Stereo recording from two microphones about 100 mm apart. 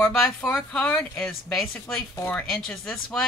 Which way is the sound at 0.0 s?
15° left (ahead or behind).